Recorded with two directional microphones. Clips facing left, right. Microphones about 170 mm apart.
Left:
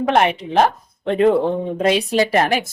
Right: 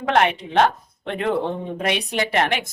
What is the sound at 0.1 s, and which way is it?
Speech, 25° left (ahead or behind).